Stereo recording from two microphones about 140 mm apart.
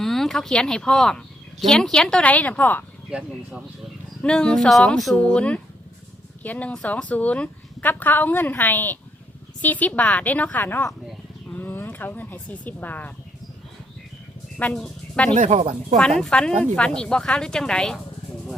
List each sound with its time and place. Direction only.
0.0 s speech: centre (ahead or behind)
3.1 s speech: 5° right (ahead or behind)
4.2 s a woman's voice: 5° left (ahead or behind)
14.6 s speech: 5° left (ahead or behind)
15.4 s speech: 55° right (ahead or behind)
16.0 s speech: 5° left (ahead or behind)